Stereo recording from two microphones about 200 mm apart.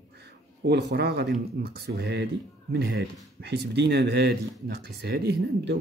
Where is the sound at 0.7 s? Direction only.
55° right (ahead or behind).